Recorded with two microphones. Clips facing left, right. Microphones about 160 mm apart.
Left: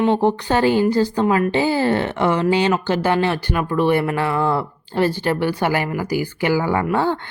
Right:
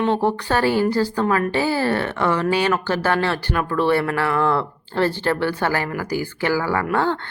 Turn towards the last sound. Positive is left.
turn(degrees=15)  # may be behind; listen again after turning